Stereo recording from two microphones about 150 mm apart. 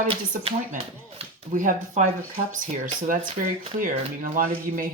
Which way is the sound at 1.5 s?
55° right (ahead or behind).